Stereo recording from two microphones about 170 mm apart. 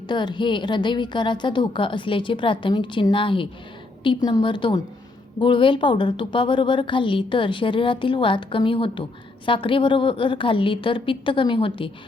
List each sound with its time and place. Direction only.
0.1 s a woman's voice: 25° left (ahead or behind)